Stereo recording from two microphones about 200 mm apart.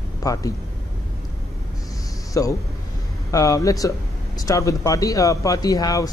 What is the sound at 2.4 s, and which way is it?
Speech, 15° left (ahead or behind).